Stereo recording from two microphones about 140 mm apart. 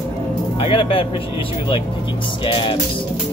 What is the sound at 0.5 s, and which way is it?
Speech, 40° left (ahead or behind).